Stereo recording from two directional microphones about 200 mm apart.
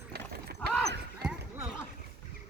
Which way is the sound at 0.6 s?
5° left (ahead or behind).